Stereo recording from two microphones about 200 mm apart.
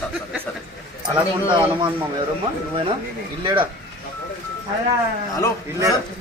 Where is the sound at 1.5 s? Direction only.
25° right (ahead or behind).